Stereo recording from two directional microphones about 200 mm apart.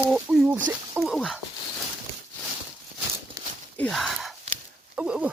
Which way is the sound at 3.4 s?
15° right (ahead or behind).